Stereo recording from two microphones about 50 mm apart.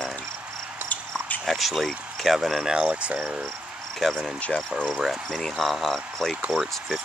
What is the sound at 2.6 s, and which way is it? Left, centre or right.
Speech, centre.